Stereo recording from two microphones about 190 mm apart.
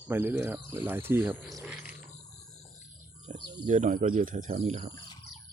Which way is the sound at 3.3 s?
35° right (ahead or behind).